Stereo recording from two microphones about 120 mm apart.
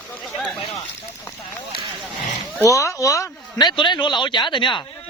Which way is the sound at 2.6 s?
25° left (ahead or behind).